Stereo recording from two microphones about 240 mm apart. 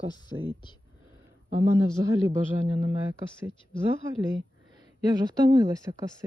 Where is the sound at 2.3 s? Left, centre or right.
Right.